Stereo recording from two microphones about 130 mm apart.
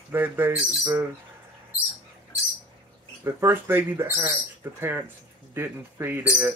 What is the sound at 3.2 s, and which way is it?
Speech, 20° right (ahead or behind).